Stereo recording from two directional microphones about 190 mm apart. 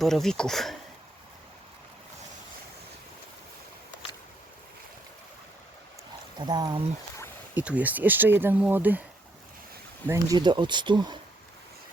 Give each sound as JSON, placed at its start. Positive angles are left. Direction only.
{"t": 0.0, "sound": "speech", "side_deg": 0}
{"t": 6.4, "sound": "speech", "side_deg": -25}
{"t": 7.5, "sound": "speech", "side_deg": -5}
{"t": 10.1, "sound": "speech", "side_deg": -20}